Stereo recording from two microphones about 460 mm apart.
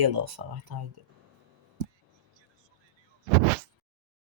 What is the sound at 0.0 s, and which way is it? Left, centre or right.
Speech, right.